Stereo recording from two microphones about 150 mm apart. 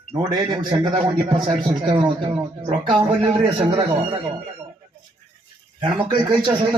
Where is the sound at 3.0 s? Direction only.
35° right (ahead or behind).